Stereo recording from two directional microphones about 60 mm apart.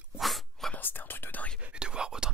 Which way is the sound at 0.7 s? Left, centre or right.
Left.